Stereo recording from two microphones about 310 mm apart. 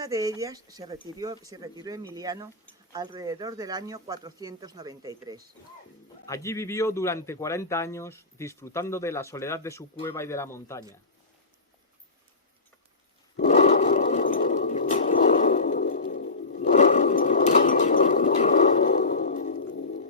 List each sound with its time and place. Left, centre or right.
0.0 s speech: centre
6.2 s a man's voice: centre
13.3 s a sound: left